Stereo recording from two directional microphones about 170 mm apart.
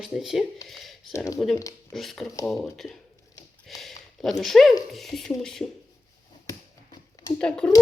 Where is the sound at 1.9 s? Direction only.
Centre (ahead or behind).